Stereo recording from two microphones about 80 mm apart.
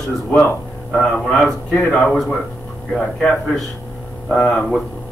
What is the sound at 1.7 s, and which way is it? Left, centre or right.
Speech, left.